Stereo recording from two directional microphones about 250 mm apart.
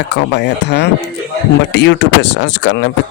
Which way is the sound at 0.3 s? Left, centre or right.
Left.